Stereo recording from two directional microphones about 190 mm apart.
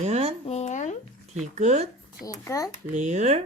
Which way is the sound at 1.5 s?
35° right (ahead or behind).